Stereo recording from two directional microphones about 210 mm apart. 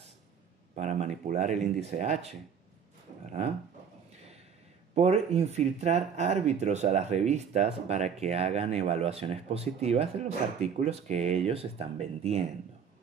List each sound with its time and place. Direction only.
0.7 s speech: 30° right (ahead or behind)
4.9 s speech: 30° right (ahead or behind)